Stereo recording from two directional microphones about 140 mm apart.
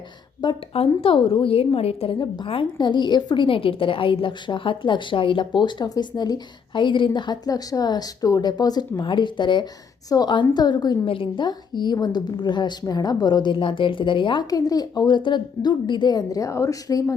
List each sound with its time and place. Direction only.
0.4 s a woman's voice: 40° left (ahead or behind)
2.1 s a woman's voice: 30° left (ahead or behind)